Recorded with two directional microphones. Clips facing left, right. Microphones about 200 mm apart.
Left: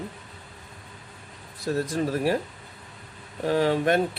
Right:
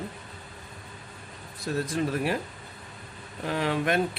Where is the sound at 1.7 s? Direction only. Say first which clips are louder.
Left 2 dB; 40° left (ahead or behind).